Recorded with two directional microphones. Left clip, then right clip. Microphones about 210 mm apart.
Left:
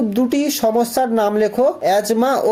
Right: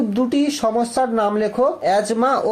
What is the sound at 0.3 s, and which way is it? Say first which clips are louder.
Speech: left 2 dB; 40° left (ahead or behind).